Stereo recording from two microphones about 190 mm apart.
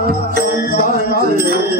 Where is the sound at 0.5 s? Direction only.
50° left (ahead or behind).